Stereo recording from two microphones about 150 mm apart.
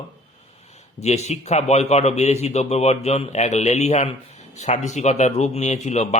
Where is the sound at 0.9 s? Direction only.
45° left (ahead or behind).